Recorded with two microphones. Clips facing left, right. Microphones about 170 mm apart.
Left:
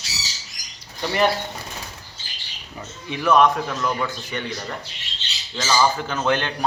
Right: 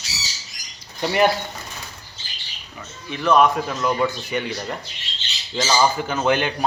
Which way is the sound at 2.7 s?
15° left (ahead or behind).